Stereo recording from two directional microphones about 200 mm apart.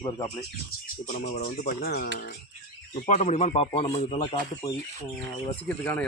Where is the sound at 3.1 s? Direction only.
35° left (ahead or behind).